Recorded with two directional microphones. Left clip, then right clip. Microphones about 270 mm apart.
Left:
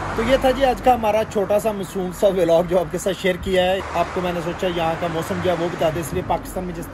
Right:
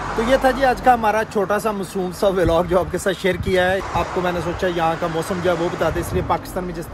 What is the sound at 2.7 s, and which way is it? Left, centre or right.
Speech, centre.